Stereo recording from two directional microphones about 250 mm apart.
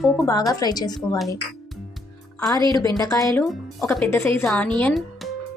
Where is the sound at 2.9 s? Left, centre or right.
Centre.